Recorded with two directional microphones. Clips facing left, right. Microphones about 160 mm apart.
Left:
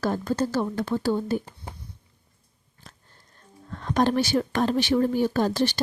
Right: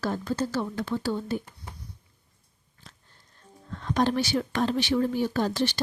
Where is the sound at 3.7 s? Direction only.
50° left (ahead or behind).